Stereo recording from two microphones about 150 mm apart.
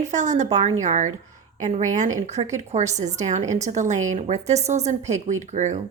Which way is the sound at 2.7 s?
50° right (ahead or behind).